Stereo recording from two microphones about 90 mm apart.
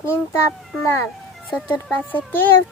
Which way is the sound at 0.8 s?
35° left (ahead or behind).